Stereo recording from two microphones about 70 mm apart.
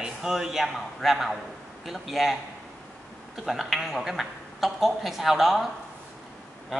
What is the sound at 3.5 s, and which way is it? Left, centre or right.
A man's voice, centre.